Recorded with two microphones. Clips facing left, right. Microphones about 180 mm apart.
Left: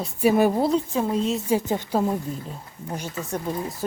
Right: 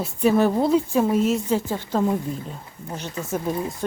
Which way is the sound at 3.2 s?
5° right (ahead or behind).